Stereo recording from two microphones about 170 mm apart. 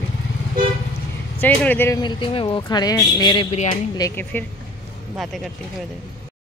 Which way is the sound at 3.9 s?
20° left (ahead or behind).